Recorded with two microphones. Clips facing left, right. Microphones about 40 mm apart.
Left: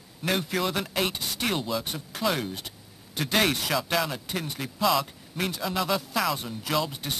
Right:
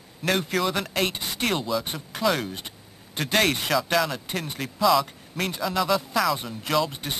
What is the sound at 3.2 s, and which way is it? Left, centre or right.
Speech, right.